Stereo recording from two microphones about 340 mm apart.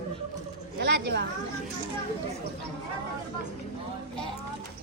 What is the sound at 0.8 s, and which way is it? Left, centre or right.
Speech, right.